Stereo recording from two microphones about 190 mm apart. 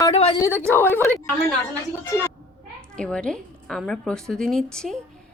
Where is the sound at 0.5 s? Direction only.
10° left (ahead or behind).